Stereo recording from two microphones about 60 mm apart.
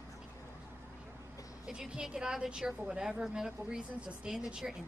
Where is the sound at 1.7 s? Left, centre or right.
Centre.